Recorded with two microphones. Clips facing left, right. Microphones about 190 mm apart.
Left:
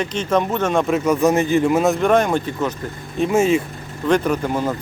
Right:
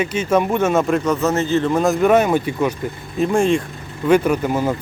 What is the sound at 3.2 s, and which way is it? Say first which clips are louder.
Speech: even; 5° left (ahead or behind).